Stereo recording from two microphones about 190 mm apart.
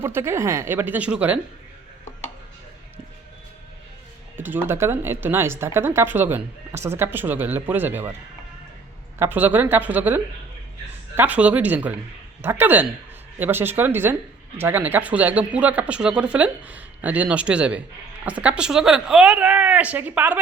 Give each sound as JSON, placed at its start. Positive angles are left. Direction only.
{"t": 0.0, "sound": "speech", "side_deg": -15}
{"t": 4.4, "sound": "speech", "side_deg": -10}
{"t": 9.1, "sound": "speech", "side_deg": -10}
{"t": 11.2, "sound": "speech", "side_deg": -5}